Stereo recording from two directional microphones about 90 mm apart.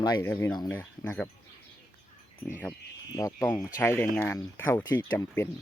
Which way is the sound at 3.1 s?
40° left (ahead or behind).